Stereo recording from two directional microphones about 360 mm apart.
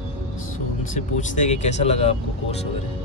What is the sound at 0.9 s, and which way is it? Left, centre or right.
Speech, left.